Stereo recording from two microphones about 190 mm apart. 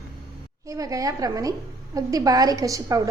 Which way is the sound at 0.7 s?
20° right (ahead or behind).